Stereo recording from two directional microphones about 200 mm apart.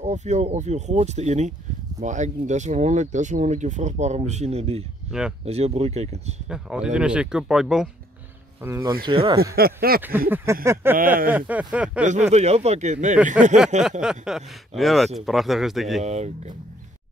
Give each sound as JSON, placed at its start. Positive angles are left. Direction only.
{"t": 0.0, "sound": "speech", "side_deg": -35}
{"t": 6.5, "sound": "speech", "side_deg": -5}
{"t": 8.6, "sound": "speech", "side_deg": -15}
{"t": 9.0, "sound": "speech", "side_deg": -25}
{"t": 9.4, "sound": "speech", "side_deg": -50}
{"t": 10.3, "sound": "speech", "side_deg": -15}
{"t": 12.1, "sound": "speech", "side_deg": -35}
{"t": 14.0, "sound": "speech", "side_deg": -5}
{"t": 16.0, "sound": "speech", "side_deg": -35}